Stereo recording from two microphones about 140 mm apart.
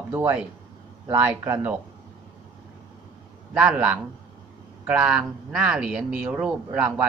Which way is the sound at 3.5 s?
10° right (ahead or behind).